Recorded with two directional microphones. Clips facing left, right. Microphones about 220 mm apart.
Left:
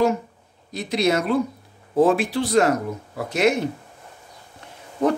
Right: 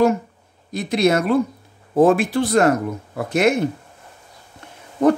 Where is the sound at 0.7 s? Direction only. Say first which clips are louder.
Right 3 dB; 50° right (ahead or behind).